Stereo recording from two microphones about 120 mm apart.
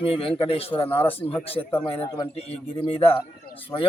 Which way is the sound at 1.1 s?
50° left (ahead or behind).